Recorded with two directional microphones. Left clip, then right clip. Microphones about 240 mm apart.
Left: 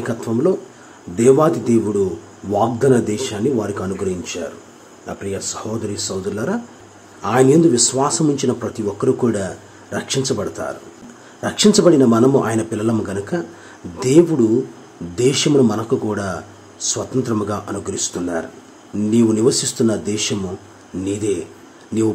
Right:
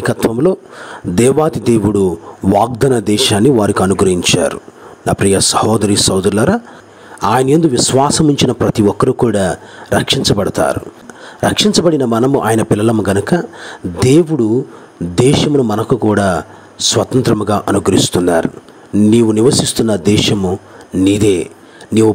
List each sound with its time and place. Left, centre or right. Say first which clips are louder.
0.0 s speech: right 6 dB; right
21.9 s speech: right 8 dB; right